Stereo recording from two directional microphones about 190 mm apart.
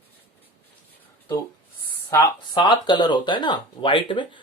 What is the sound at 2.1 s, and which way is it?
Speech, 25° left (ahead or behind).